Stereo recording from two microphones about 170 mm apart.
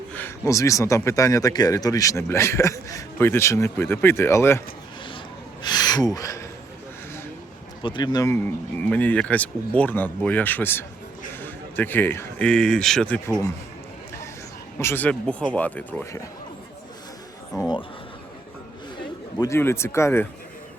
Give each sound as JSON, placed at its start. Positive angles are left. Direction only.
{"t": 0.1, "sound": "speech", "side_deg": 10}
{"t": 5.6, "sound": "a sound", "side_deg": 25}
{"t": 6.1, "sound": "speech", "side_deg": 20}
{"t": 7.8, "sound": "speech", "side_deg": 25}
{"t": 14.8, "sound": "speech", "side_deg": 15}
{"t": 19.4, "sound": "speech", "side_deg": 15}